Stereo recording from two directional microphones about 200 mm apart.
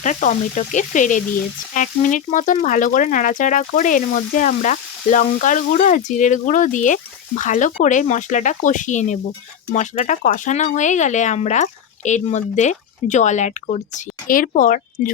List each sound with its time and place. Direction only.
0.0 s speech: 40° left (ahead or behind)